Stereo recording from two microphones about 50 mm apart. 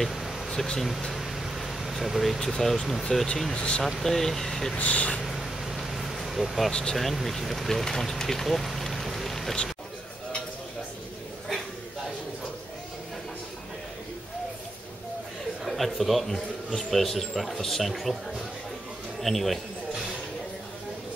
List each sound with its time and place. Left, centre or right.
0.0 s a sound: centre
0.7 s speech: centre
3.5 s speech: left
4.0 s speech: centre
4.7 s speech: left
5.2 s vehicle: centre
6.7 s speech: centre
15.6 s a man's voice: centre
19.2 s speech: centre